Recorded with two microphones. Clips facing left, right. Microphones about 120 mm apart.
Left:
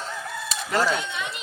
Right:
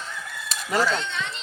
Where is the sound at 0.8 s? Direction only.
10° left (ahead or behind).